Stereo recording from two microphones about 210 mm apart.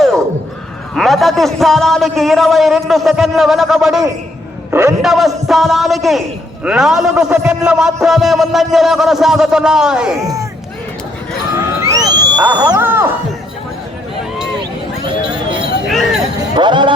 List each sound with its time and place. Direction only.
0.9 s a man's voice: centre (ahead or behind)
4.7 s a man's voice: 15° right (ahead or behind)
5.0 s a man's voice: centre (ahead or behind)
11.8 s a sound: 15° right (ahead or behind)
12.5 s music: 15° right (ahead or behind)
15.9 s a sound: centre (ahead or behind)
16.6 s speech: 20° right (ahead or behind)